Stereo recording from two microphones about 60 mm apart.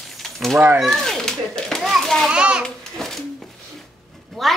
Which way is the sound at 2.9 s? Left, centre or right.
Centre.